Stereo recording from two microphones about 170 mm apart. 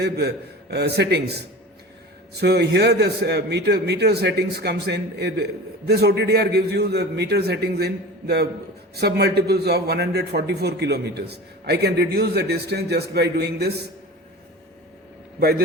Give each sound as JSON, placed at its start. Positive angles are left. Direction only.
{"t": 0.0, "sound": "a man's voice", "side_deg": -75}
{"t": 2.4, "sound": "a man's voice", "side_deg": -75}
{"t": 15.4, "sound": "a man's voice", "side_deg": -70}